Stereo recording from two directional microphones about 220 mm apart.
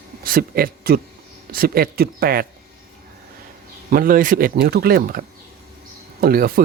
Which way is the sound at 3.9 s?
40° right (ahead or behind).